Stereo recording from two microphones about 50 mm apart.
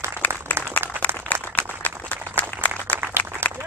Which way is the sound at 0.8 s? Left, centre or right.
Left.